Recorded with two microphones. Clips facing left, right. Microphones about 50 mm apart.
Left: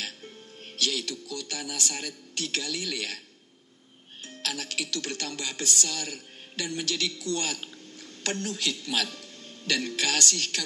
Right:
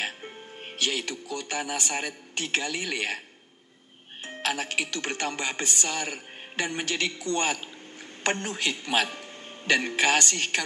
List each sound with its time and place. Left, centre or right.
0.7 s speech: right
4.2 s a man's voice: right